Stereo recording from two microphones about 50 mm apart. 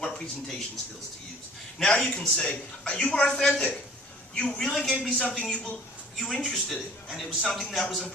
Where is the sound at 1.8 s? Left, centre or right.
Centre.